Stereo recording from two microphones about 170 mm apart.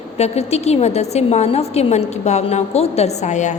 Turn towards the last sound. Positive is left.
turn(degrees=45)  # may be behind; listen again after turning